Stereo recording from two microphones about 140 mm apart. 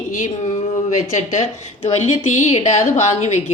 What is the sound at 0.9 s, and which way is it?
Speech, 55° left (ahead or behind).